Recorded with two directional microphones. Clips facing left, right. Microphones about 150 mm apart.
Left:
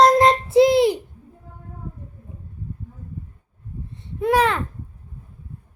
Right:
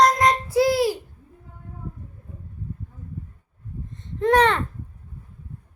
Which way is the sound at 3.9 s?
10° left (ahead or behind).